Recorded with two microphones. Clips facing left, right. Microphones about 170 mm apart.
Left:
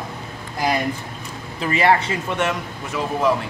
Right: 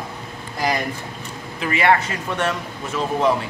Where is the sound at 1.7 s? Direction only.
30° left (ahead or behind).